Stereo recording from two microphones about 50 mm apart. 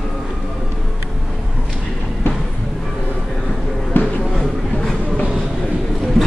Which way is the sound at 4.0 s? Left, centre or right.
Left.